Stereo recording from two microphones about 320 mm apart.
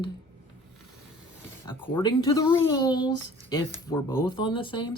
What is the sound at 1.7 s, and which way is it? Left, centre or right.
Speech, centre.